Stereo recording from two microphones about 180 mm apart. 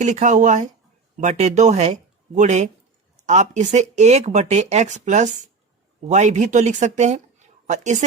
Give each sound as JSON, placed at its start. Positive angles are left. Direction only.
{"t": 0.0, "sound": "speech", "side_deg": -40}